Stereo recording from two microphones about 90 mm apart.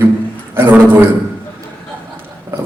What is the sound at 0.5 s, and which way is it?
Speech, 20° right (ahead or behind).